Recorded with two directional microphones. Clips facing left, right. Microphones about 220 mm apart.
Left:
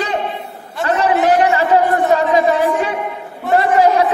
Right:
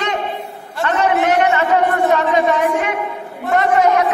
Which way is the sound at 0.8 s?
35° left (ahead or behind).